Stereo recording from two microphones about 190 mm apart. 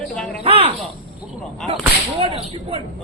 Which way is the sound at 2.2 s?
30° right (ahead or behind).